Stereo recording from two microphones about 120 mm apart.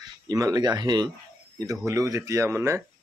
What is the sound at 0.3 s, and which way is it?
A man's voice, 30° right (ahead or behind).